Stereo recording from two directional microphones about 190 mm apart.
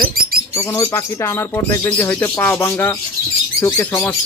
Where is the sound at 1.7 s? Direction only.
15° left (ahead or behind).